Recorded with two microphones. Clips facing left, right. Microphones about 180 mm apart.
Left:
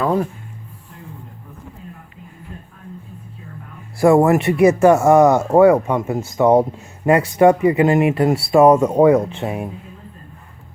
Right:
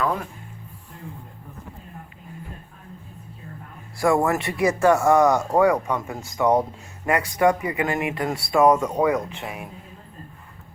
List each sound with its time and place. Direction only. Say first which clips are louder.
0.0 s speech: left 7 dB; 30° left (ahead or behind)
4.3 s speech: left 9 dB; 20° left (ahead or behind)